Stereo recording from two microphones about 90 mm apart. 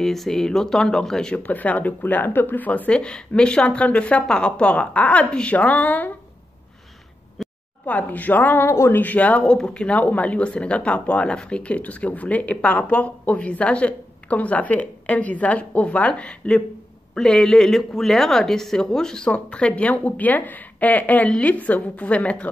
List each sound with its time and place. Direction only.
0.0 s speech: 5° left (ahead or behind)
7.4 s a sound: centre (ahead or behind)
7.8 s speech: 20° left (ahead or behind)